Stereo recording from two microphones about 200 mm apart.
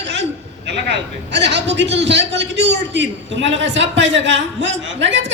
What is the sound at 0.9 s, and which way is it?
A man's voice, 60° right (ahead or behind).